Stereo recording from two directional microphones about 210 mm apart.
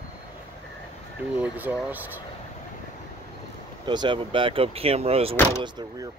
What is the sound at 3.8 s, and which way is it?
Speech, 20° right (ahead or behind).